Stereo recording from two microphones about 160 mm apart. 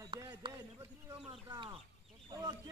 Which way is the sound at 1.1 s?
35° right (ahead or behind).